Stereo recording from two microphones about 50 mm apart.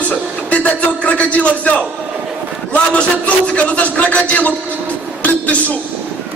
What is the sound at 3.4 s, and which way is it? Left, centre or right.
A man's voice, left.